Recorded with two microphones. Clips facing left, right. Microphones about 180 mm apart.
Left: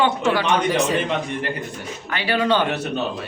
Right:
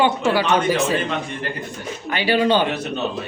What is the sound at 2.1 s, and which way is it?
Speech, 20° right (ahead or behind).